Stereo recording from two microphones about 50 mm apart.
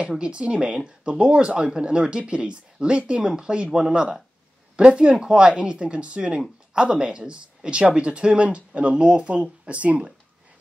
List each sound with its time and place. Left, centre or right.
0.2 s speech: right